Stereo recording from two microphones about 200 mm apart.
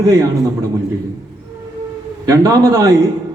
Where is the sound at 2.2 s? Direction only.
15° right (ahead or behind).